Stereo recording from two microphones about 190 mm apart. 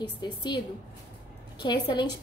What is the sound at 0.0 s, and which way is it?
Speech, 25° left (ahead or behind).